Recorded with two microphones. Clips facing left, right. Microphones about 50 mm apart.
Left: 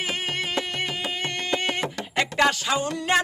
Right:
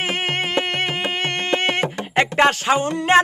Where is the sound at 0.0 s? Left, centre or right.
Right.